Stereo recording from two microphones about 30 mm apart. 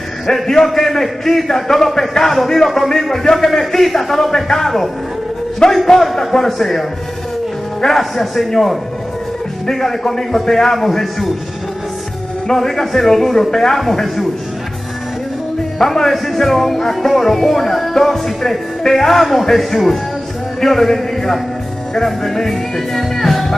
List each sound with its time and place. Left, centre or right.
0.3 s speech: centre
5.6 s a man's voice: left
5.9 s speech: centre
8.0 s a man's voice: centre
12.5 s speech: centre
15.8 s speech: centre